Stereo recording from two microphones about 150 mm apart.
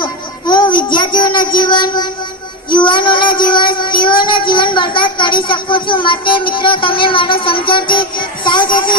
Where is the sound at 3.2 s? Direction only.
70° left (ahead or behind).